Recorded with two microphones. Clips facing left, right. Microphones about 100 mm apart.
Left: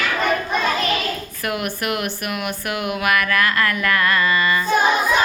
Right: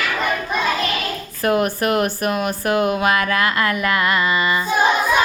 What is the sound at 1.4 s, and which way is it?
Speech, 35° right (ahead or behind).